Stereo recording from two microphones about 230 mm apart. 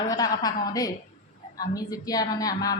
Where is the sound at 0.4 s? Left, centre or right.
Centre.